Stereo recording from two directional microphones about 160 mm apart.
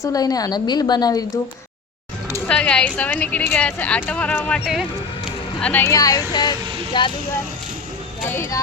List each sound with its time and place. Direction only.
0.0 s a woman's voice: 25° left (ahead or behind)
2.5 s a woman's voice: 5° left (ahead or behind); by 7.1 s 30° left (ahead or behind)
8.3 s a woman's voice: 20° left (ahead or behind)